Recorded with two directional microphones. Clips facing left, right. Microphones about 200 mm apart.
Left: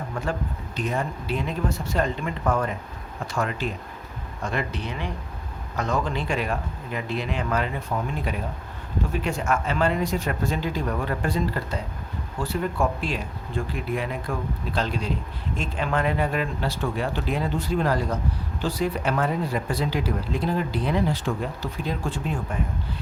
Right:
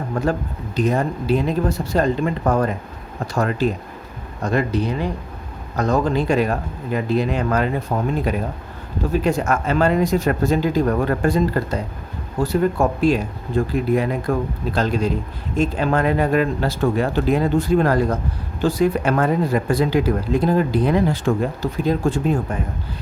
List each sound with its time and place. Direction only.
0.1 s speech: 40° right (ahead or behind)